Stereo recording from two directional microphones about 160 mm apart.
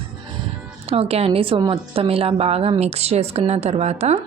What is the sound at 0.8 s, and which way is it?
A woman's voice, 40° right (ahead or behind).